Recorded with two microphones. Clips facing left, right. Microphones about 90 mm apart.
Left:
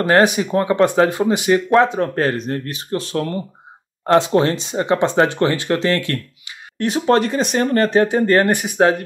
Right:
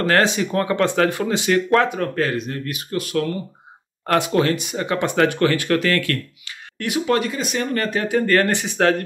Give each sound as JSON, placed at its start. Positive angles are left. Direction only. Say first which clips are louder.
{"t": 0.0, "sound": "speech", "louder": "left 4 dB", "side_deg": 20}